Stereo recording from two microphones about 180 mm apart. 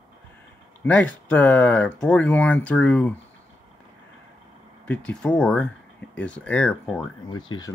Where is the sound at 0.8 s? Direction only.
5° left (ahead or behind).